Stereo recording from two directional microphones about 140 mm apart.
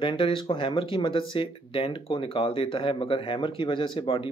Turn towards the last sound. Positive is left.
turn(degrees=40)  # may be behind; listen again after turning